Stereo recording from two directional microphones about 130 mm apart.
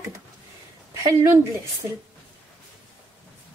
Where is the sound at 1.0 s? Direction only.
20° right (ahead or behind).